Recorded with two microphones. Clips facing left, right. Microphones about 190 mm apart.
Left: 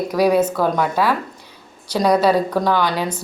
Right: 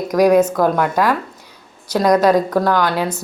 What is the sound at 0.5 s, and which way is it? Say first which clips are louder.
Speech: right 2 dB; 10° right (ahead or behind).